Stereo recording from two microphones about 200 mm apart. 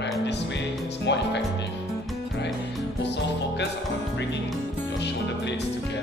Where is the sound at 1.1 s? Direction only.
60° left (ahead or behind).